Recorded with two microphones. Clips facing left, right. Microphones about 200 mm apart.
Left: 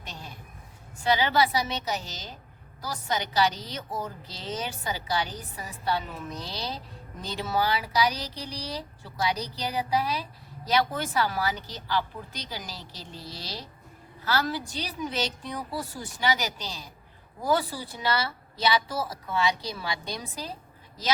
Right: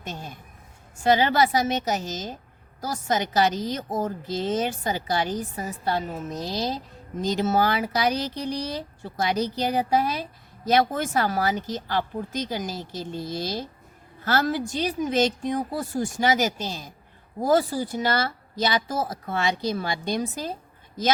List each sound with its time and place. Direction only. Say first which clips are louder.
0.0 s a woman's voice: right 6 dB; 45° right (ahead or behind)